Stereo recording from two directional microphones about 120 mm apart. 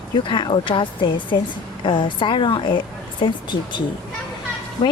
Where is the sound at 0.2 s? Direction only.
45° left (ahead or behind).